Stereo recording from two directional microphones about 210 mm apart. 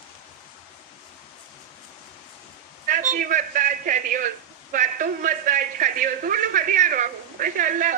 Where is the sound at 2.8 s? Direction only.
35° right (ahead or behind).